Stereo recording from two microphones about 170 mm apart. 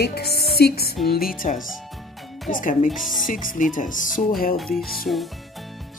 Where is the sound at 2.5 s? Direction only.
50° left (ahead or behind).